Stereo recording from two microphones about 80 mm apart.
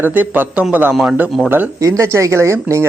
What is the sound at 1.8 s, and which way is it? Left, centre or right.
Speech, right.